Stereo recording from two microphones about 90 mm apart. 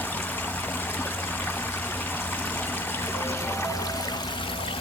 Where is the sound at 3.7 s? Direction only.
40° left (ahead or behind); by 4.7 s 70° left (ahead or behind).